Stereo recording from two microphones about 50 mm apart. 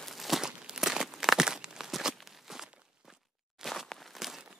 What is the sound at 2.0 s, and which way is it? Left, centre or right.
Walk, centre.